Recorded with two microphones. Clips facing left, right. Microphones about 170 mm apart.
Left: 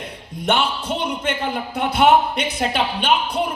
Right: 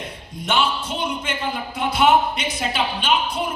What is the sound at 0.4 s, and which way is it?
A man's voice, 60° left (ahead or behind).